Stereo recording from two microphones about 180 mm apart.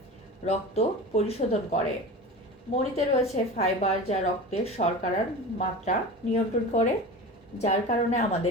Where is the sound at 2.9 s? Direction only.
35° left (ahead or behind).